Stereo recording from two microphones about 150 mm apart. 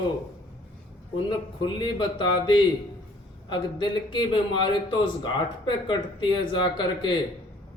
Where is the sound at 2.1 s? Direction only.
30° left (ahead or behind).